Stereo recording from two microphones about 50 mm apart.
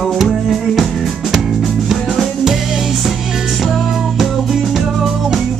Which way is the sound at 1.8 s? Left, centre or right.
Centre.